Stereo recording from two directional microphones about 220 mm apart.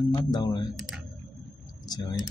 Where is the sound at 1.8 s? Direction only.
15° left (ahead or behind).